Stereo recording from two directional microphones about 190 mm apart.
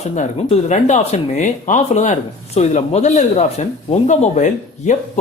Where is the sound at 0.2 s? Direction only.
35° left (ahead or behind).